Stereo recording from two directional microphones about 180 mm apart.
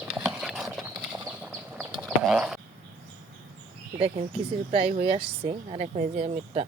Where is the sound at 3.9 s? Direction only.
35° right (ahead or behind).